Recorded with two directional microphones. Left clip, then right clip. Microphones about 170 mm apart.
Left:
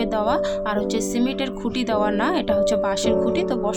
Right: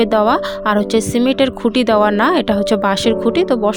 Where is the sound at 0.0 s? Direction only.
40° right (ahead or behind).